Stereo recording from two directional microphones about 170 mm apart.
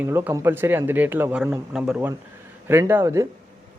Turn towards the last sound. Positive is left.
turn(degrees=-15)  # may be behind; listen again after turning